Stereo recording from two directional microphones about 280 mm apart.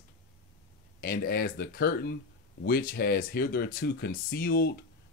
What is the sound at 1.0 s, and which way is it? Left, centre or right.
Speech, left.